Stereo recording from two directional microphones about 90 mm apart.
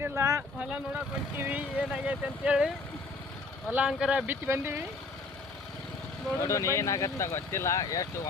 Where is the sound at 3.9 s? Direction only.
10° right (ahead or behind).